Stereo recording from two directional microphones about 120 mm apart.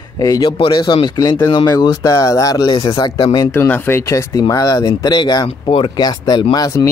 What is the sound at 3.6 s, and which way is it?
Speech, 20° left (ahead or behind).